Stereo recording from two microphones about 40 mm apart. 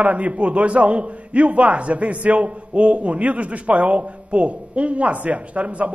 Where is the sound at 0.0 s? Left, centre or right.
Right.